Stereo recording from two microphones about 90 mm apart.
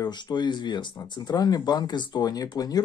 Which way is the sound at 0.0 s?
55° left (ahead or behind).